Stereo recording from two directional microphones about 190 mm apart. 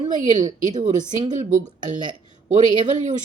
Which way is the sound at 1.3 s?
40° right (ahead or behind).